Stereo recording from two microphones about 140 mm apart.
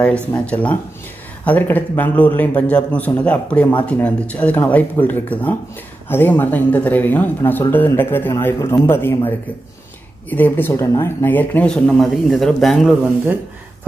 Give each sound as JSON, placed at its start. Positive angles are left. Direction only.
{"t": 0.0, "sound": "speech", "side_deg": 10}
{"t": 10.3, "sound": "speech", "side_deg": 15}